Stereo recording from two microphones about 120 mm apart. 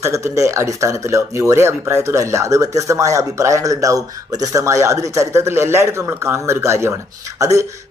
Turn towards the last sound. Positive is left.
turn(degrees=-25)  # may be behind; listen again after turning